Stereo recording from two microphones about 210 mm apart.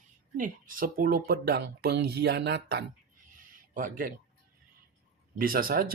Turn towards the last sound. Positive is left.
turn(degrees=-45)  # may be behind; listen again after turning